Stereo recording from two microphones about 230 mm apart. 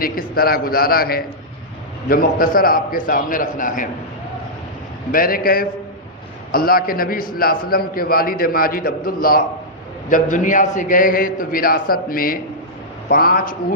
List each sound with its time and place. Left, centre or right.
0.0 s a man's voice: left
5.1 s a man's voice: left